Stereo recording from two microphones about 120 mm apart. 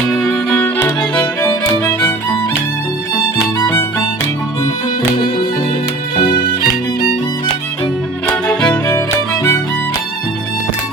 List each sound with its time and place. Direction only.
0.2 s violin: 10° left (ahead or behind)
1.4 s music: 20° left (ahead or behind)
3.6 s music: 25° left (ahead or behind)
8.4 s music: 15° left (ahead or behind)